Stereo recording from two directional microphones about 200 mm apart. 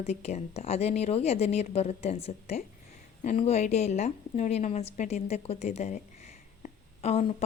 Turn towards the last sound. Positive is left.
turn(degrees=30)  # may be behind; listen again after turning